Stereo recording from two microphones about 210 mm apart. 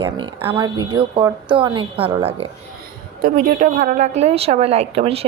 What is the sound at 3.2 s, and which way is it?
A woman's voice, 40° right (ahead or behind).